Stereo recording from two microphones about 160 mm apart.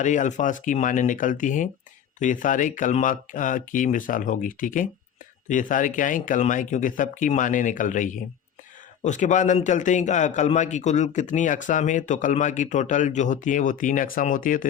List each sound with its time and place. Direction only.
0.0 s a man's voice: 50° left (ahead or behind)